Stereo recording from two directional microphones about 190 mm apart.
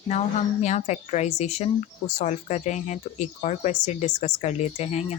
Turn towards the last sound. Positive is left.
turn(degrees=35)  # may be behind; listen again after turning